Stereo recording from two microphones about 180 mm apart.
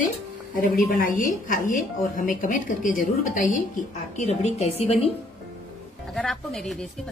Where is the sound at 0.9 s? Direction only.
50° left (ahead or behind).